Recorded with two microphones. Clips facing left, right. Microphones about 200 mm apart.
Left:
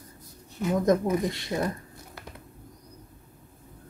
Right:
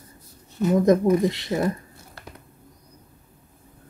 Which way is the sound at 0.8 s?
25° right (ahead or behind).